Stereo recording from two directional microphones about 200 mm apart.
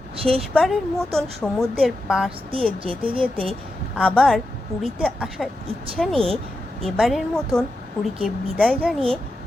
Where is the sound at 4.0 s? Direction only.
5° left (ahead or behind).